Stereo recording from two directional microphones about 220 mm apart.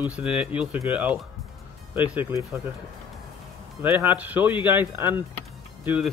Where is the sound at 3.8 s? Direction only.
10° right (ahead or behind).